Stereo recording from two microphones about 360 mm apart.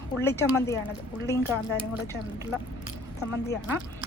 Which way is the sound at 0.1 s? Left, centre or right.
Centre.